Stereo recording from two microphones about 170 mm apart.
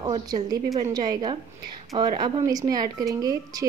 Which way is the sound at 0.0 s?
25° right (ahead or behind).